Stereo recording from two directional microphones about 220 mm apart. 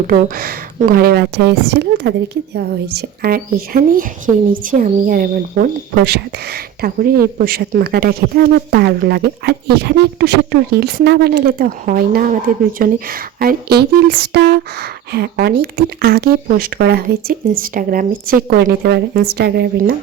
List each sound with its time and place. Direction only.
0.1 s speech: 40° right (ahead or behind)